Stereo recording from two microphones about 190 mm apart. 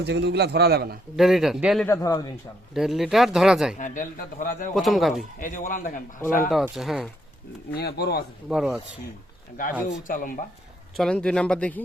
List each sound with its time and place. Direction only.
0.0 s a man's voice: 60° right (ahead or behind)
1.1 s speech: centre (ahead or behind)
1.9 s a man's voice: 20° left (ahead or behind)
2.7 s speech: centre (ahead or behind)
3.8 s a man's voice: 40° left (ahead or behind)
4.7 s speech: centre (ahead or behind)
5.4 s a man's voice: 45° left (ahead or behind)
6.5 s speech: centre (ahead or behind)
7.8 s speech: 60° left (ahead or behind)
8.4 s speech: 5° right (ahead or behind)
9.6 s a man's voice: 45° left (ahead or behind)
10.9 s speech: 5° left (ahead or behind)